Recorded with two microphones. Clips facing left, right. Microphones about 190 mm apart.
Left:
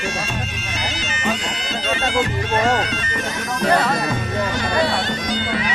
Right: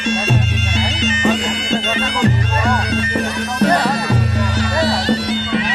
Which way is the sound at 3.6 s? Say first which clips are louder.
Right 3 dB; 35° right (ahead or behind).